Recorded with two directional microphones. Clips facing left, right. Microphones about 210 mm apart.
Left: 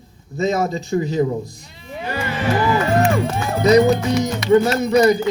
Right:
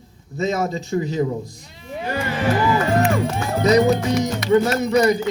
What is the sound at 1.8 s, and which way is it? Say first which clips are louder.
Music: right 1 dB; 40° right (ahead or behind).